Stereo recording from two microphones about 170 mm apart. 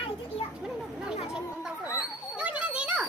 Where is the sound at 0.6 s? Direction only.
5° right (ahead or behind).